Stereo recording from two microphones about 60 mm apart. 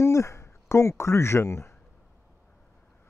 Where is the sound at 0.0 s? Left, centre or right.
Left.